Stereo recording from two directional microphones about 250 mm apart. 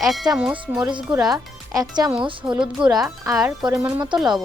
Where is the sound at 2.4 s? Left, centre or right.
Centre.